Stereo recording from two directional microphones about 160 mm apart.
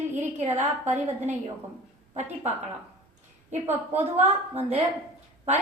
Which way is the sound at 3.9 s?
45° right (ahead or behind).